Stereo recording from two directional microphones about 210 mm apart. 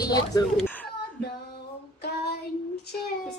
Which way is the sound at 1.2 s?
50° left (ahead or behind).